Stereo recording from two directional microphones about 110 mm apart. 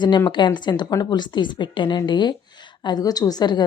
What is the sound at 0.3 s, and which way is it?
A woman's voice, 45° left (ahead or behind).